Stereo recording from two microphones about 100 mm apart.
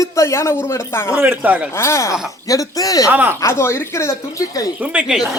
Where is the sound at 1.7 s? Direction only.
25° left (ahead or behind).